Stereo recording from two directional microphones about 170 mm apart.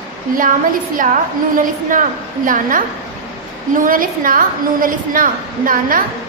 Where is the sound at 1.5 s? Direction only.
50° right (ahead or behind).